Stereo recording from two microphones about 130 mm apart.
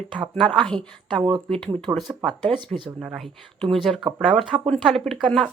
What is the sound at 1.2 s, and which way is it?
Speech, 45° right (ahead or behind).